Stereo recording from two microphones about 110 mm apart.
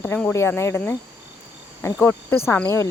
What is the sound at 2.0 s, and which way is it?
Speech, 20° left (ahead or behind).